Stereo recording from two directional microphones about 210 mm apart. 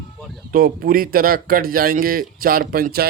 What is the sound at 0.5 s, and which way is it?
A man's voice, 45° right (ahead or behind).